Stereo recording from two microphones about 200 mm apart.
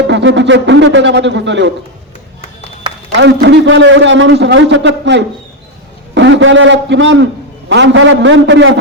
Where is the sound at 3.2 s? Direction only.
60° right (ahead or behind).